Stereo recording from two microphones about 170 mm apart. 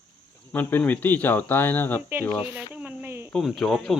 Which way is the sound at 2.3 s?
5° right (ahead or behind).